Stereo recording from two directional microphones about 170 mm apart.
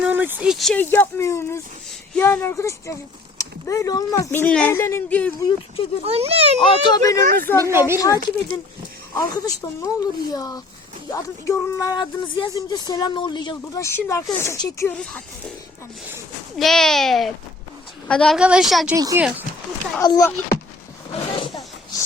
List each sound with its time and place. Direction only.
0.0 s speech: 10° right (ahead or behind); by 5.3 s 10° left (ahead or behind)
5.4 s speech: 30° left (ahead or behind)
6.1 s a child's voice: 35° right (ahead or behind)
6.6 s speech: 25° left (ahead or behind)
7.7 s a woman's voice: 15° right (ahead or behind)
7.9 s speech: 20° left (ahead or behind)
14.9 s speech: 5° left (ahead or behind)
16.6 s speech: centre (ahead or behind)
18.3 s speech: 5° right (ahead or behind)
18.9 s speech: 20° right (ahead or behind)
20.0 s speech: 20° left (ahead or behind)
21.3 s a sound: 30° left (ahead or behind)